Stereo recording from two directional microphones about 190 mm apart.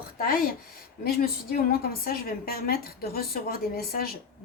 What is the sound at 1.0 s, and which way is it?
A woman's voice, 55° left (ahead or behind).